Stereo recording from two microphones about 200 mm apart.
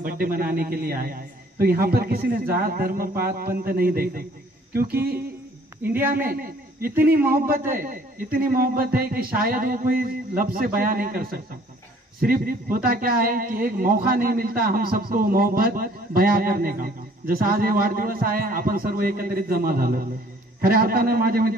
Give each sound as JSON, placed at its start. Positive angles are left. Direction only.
{"t": 0.0, "sound": "a man's voice", "side_deg": -45}
{"t": 5.9, "sound": "speech", "side_deg": -10}
{"t": 6.1, "sound": "a man's voice", "side_deg": -45}